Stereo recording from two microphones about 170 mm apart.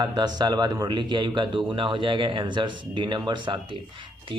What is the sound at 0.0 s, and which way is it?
Speech, 25° right (ahead or behind).